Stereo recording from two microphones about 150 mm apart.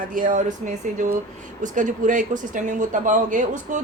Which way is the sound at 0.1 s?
65° right (ahead or behind).